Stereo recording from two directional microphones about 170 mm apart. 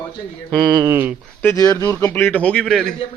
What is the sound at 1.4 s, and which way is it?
Speech, 20° left (ahead or behind).